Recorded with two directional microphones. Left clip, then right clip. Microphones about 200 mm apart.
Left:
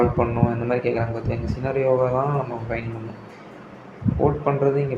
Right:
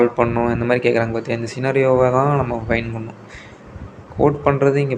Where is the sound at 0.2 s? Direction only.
20° right (ahead or behind).